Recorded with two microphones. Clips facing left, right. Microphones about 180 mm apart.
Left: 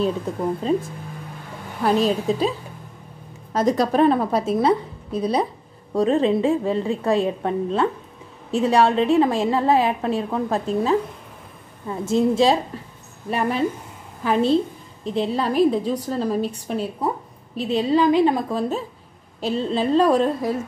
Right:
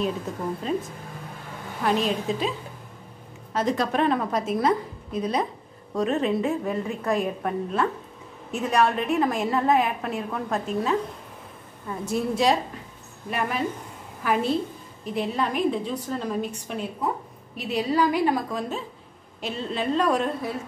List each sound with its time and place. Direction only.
2.0 s a woman's voice: 35° left (ahead or behind)
3.5 s a woman's voice: 40° left (ahead or behind)
12.0 s a woman's voice: 25° left (ahead or behind)